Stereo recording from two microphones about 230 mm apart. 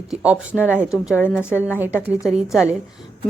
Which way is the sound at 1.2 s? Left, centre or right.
Centre.